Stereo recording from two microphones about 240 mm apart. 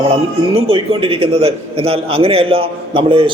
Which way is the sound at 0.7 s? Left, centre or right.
Right.